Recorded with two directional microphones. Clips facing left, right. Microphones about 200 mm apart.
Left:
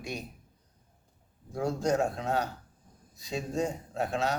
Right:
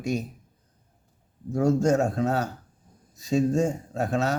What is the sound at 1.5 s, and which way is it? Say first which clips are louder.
A man's voice: right 7 dB; 45° right (ahead or behind).